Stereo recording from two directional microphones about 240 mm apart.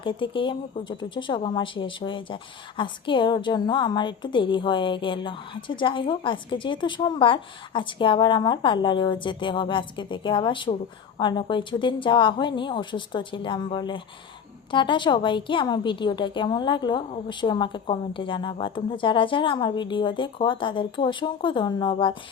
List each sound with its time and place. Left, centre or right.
0.0 s a woman's voice: left